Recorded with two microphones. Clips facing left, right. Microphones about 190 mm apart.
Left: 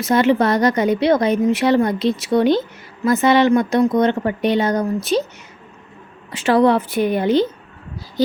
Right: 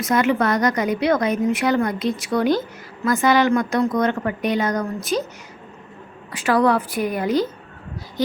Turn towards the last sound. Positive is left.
turn(degrees=25)  # may be behind; listen again after turning